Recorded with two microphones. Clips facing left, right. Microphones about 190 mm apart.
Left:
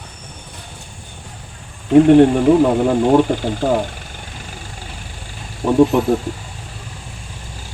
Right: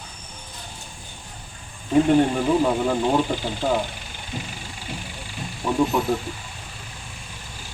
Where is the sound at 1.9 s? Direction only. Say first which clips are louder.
Left 8 dB; 60° left (ahead or behind).